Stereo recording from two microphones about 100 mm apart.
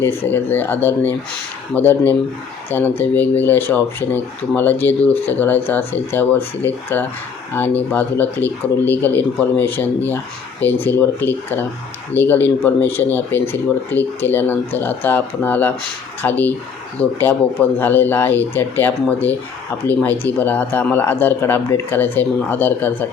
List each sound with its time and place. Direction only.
0.0 s speech: 20° left (ahead or behind)